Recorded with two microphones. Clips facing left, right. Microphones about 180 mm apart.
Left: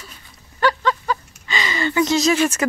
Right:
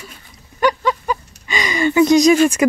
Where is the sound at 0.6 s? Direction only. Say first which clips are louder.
Right 2 dB; 15° right (ahead or behind).